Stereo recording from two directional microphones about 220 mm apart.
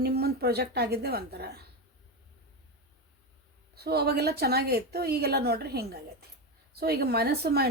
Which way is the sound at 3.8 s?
45° right (ahead or behind).